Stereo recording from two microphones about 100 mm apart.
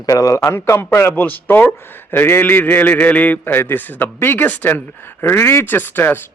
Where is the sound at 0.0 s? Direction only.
35° left (ahead or behind).